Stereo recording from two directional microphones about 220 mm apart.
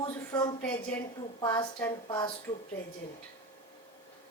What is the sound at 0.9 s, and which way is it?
A woman's voice, 5° left (ahead or behind).